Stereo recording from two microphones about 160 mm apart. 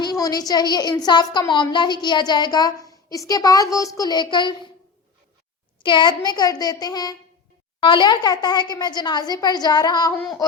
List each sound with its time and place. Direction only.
0.0 s a woman's voice: 25° left (ahead or behind)
5.8 s a woman's voice: 30° left (ahead or behind)